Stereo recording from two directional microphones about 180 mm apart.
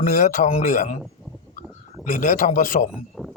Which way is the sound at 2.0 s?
45° left (ahead or behind).